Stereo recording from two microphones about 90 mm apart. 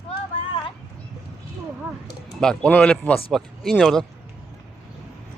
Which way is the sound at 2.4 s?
10° left (ahead or behind).